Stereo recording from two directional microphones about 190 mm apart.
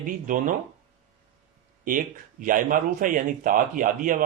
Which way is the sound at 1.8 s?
45° right (ahead or behind).